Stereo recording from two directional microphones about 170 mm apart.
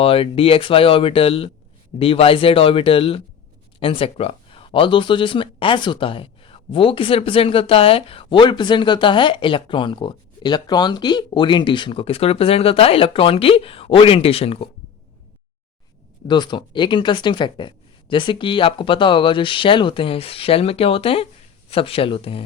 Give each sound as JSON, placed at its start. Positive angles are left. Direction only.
{"t": 0.0, "sound": "speech", "side_deg": 35}
{"t": 16.2, "sound": "speech", "side_deg": 25}